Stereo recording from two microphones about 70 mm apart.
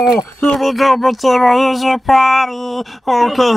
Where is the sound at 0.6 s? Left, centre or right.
Centre.